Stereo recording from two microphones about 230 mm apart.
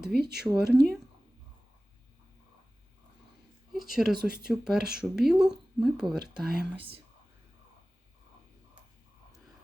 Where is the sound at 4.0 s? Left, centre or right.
Centre.